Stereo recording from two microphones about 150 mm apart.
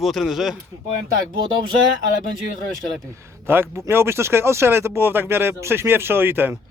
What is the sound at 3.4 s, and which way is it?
Speech, 15° right (ahead or behind).